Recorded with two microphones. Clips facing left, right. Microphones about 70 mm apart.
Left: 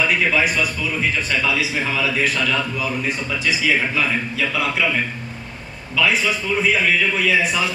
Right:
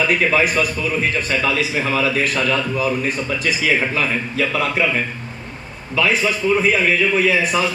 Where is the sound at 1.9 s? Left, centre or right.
Right.